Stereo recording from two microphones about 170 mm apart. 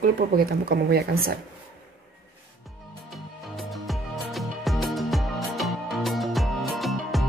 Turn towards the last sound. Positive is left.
turn(degrees=0)  # may be behind; listen again after turning